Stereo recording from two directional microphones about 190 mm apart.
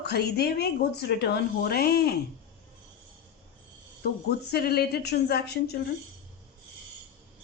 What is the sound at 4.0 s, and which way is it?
A woman's voice, 55° left (ahead or behind).